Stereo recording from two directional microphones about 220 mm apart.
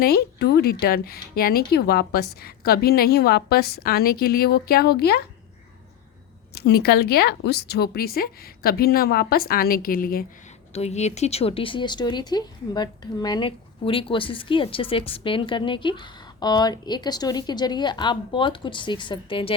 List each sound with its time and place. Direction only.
0.0 s speech: 45° left (ahead or behind)
6.5 s speech: 45° left (ahead or behind)
10.7 s speech: 30° left (ahead or behind)